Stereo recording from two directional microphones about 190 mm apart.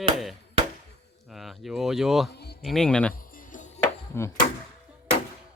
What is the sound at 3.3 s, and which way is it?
Music, 45° left (ahead or behind).